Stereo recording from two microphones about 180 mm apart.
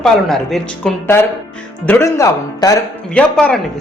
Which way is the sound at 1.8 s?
15° left (ahead or behind).